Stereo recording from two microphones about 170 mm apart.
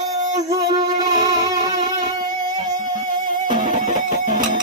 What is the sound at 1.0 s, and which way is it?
Music, 20° right (ahead or behind).